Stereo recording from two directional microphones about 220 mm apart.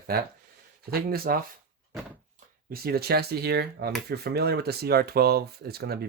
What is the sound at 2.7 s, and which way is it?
Speech, 45° right (ahead or behind).